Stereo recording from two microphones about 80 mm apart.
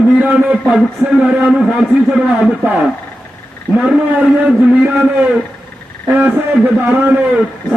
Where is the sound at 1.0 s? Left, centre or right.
Right.